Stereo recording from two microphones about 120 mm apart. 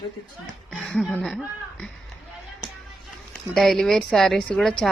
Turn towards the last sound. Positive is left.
turn(degrees=5)  # may be behind; listen again after turning